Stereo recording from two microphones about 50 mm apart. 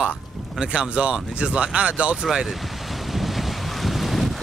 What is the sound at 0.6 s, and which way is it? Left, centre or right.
Speech, centre.